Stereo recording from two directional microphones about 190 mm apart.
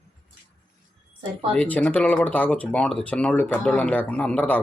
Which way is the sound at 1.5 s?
5° left (ahead or behind).